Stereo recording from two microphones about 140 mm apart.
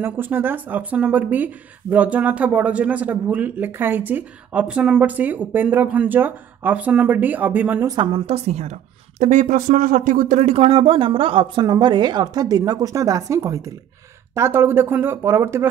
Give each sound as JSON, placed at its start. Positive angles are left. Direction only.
{"t": 0.0, "sound": "speech", "side_deg": -15}
{"t": 7.8, "sound": "a woman's voice", "side_deg": -30}